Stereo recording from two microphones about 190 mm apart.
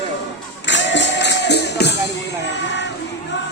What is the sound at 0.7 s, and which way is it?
Music, 70° left (ahead or behind).